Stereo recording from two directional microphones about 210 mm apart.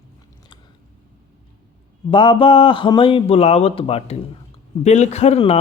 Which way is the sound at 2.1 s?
25° left (ahead or behind).